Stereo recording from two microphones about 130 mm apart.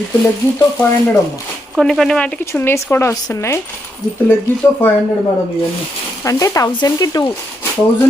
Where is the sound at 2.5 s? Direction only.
20° left (ahead or behind).